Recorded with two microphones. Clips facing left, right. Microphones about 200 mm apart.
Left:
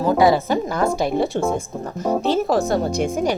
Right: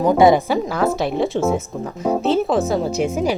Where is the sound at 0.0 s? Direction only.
20° right (ahead or behind).